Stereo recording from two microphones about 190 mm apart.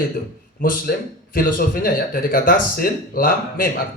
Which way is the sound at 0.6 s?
50° left (ahead or behind).